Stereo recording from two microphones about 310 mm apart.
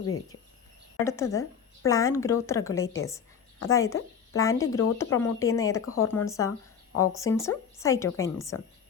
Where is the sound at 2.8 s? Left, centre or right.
Left.